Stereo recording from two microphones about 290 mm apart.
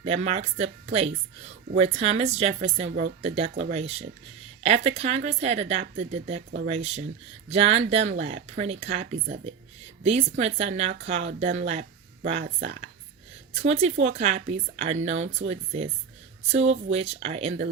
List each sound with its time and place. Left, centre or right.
0.0 s speech: right